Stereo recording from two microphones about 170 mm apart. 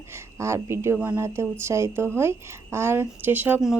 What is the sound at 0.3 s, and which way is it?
A woman's voice, 15° right (ahead or behind).